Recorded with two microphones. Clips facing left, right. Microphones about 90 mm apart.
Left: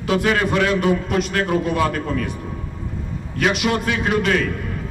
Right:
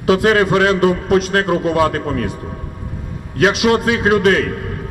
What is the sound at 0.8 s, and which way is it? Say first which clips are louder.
Speech: right 5 dB; 65° right (ahead or behind).